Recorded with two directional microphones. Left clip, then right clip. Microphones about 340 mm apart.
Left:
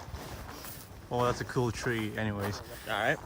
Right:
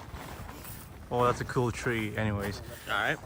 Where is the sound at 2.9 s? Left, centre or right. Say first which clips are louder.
Even; left.